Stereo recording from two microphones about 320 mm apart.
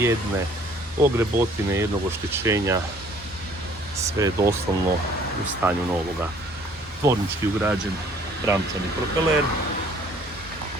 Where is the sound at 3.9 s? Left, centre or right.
Centre.